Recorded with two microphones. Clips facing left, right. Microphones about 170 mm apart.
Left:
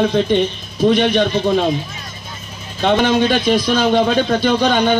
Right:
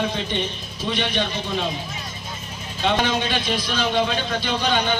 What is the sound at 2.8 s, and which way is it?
A man's voice, 50° left (ahead or behind).